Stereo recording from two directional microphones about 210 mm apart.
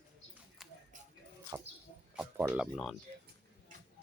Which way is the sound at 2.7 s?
Centre (ahead or behind).